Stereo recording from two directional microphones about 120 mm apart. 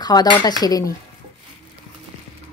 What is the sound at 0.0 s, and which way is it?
Speech, 35° left (ahead or behind).